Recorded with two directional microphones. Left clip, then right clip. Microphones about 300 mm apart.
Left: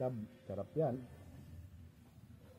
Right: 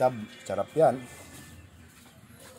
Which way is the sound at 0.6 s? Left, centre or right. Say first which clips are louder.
Right 15 dB; right.